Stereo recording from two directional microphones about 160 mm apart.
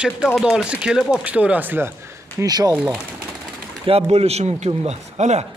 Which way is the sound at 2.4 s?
25° right (ahead or behind).